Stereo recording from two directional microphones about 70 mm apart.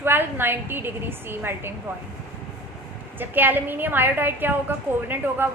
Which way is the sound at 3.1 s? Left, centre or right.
Right.